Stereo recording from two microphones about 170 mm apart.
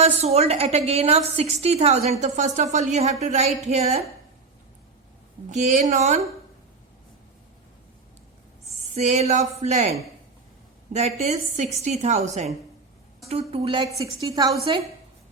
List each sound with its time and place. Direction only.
0.0 s a woman's voice: 35° right (ahead or behind)
5.5 s speech: 45° right (ahead or behind)
9.0 s a woman's voice: 40° right (ahead or behind)
10.9 s a woman's voice: 40° right (ahead or behind)
13.5 s a woman's voice: 35° right (ahead or behind)